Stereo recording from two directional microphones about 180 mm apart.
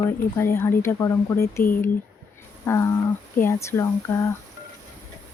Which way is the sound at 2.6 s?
15° left (ahead or behind).